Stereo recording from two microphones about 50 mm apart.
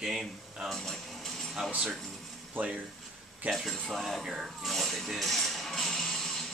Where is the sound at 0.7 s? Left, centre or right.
Centre.